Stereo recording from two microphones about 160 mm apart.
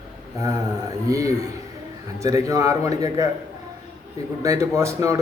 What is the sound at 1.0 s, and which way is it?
A man's voice, 20° right (ahead or behind).